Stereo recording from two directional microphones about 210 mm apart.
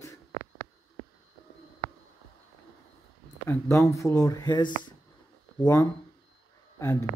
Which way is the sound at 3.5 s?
15° left (ahead or behind).